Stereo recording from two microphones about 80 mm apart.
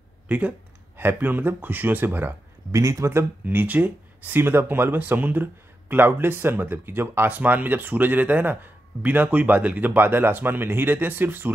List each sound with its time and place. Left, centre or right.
0.3 s speech: centre
2.7 s speech: right
3.4 s speech: right